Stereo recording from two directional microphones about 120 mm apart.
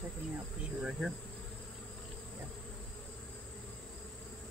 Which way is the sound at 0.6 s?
5° right (ahead or behind).